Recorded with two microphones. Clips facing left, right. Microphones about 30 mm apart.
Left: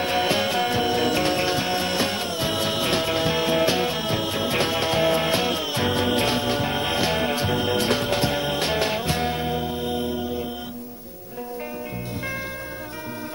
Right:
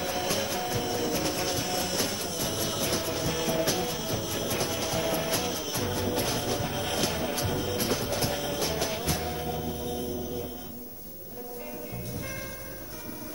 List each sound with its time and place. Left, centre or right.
0.0 s music: left
6.3 s music: left